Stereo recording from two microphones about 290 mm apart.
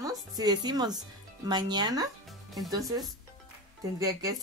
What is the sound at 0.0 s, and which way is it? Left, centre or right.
Speech, centre.